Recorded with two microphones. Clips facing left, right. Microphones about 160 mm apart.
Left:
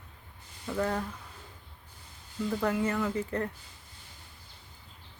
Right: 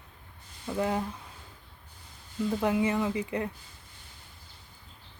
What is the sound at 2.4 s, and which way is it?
A woman's voice, 15° right (ahead or behind).